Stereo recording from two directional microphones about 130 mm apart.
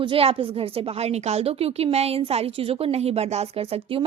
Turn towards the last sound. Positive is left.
turn(degrees=-45)  # may be behind; listen again after turning